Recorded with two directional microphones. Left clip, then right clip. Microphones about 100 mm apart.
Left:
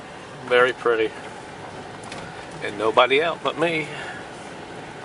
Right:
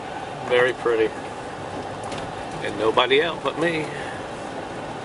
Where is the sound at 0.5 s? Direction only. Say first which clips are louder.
Left 1 dB; 25° left (ahead or behind).